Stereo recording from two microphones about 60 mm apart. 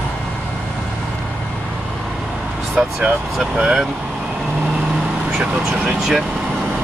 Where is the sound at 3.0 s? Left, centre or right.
Centre.